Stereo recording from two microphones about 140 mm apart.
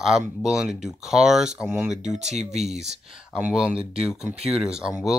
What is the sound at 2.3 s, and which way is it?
Speech, 55° right (ahead or behind).